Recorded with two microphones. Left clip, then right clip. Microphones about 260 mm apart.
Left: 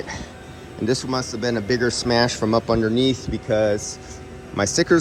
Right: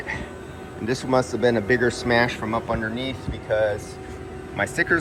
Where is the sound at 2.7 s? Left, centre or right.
Left.